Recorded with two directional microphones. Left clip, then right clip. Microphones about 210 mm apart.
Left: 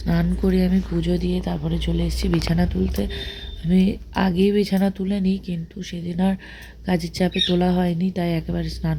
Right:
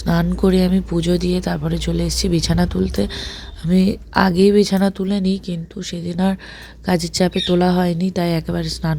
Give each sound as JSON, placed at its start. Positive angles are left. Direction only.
{"t": 0.0, "sound": "speech", "side_deg": -30}